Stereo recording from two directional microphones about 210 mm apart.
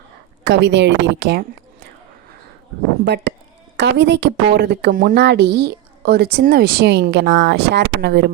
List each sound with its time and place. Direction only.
0.4 s a woman's voice: 60° right (ahead or behind)
3.0 s a woman's voice: 55° right (ahead or behind)